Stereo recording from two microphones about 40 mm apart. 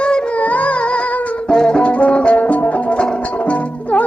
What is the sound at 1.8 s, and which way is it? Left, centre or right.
Music, left.